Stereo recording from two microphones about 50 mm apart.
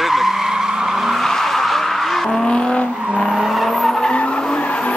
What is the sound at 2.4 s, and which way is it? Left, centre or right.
Vehicle, centre.